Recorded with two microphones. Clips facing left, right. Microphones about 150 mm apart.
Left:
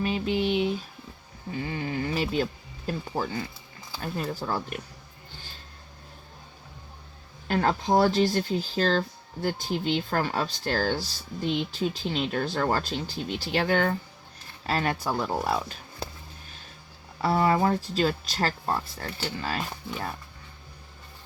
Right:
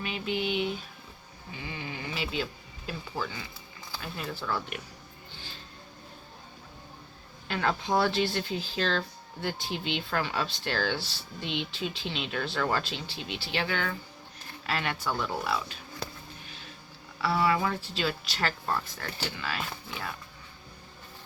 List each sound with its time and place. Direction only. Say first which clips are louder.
0.0 s speech: left 6 dB; 35° left (ahead or behind)
7.4 s speech: left 5 dB; 40° left (ahead or behind)
17.2 s speech: left 4 dB; 40° left (ahead or behind)